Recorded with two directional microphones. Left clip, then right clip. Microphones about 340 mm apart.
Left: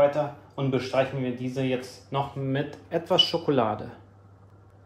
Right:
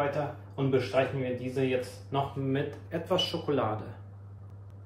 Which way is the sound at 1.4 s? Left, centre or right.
Left.